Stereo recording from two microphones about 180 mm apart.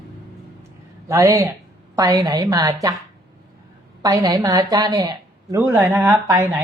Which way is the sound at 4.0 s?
20° right (ahead or behind).